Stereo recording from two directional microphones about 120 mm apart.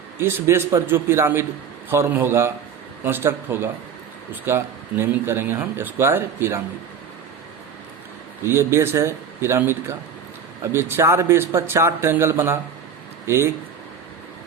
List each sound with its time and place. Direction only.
0.2 s speech: 20° right (ahead or behind)
8.4 s speech: 20° right (ahead or behind)